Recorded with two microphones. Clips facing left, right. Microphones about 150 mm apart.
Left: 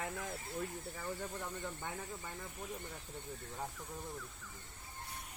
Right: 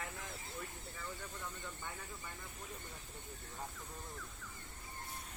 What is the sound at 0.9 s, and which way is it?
Speech, 40° left (ahead or behind).